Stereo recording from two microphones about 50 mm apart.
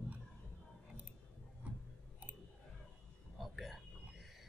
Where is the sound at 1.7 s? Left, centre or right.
Right.